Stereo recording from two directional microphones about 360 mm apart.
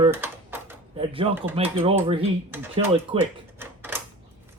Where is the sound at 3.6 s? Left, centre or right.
Centre.